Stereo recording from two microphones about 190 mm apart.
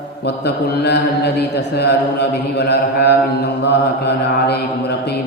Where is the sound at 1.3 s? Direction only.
60° left (ahead or behind).